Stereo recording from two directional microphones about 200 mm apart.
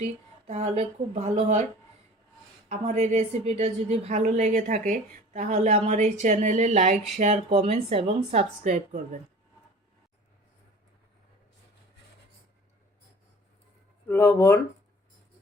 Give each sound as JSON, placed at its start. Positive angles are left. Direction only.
{"t": 0.4, "sound": "a woman's voice", "side_deg": -35}
{"t": 2.6, "sound": "a woman's voice", "side_deg": -35}
{"t": 14.1, "sound": "speech", "side_deg": 10}